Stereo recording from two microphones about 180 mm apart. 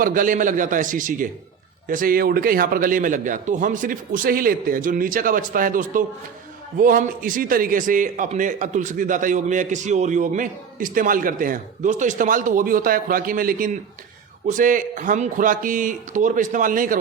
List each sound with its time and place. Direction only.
0.0 s a man's voice: 50° right (ahead or behind)